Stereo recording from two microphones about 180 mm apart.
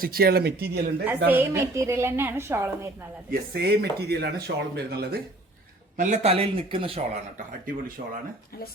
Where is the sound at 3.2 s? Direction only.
60° right (ahead or behind).